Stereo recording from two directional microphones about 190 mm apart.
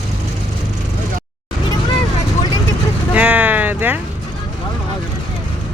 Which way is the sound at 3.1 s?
10° right (ahead or behind).